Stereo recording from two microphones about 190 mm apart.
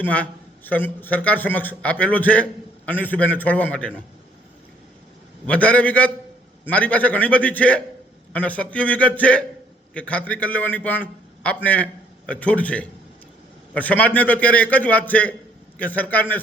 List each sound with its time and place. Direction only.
0.0 s a man's voice: 10° left (ahead or behind)
5.5 s a man's voice: 5° left (ahead or behind)